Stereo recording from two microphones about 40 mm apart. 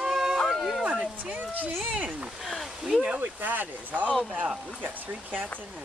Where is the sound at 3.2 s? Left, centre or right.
Right.